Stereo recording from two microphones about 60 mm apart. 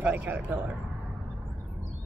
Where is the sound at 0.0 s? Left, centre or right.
Right.